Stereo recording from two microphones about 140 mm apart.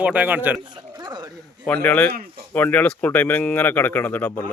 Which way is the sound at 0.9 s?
30° right (ahead or behind).